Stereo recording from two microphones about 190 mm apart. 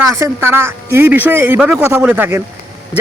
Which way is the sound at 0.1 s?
15° right (ahead or behind).